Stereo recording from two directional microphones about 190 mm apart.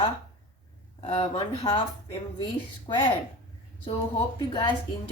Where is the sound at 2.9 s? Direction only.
25° left (ahead or behind).